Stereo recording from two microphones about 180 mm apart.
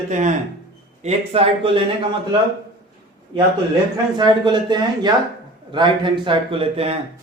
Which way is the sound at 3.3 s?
25° right (ahead or behind).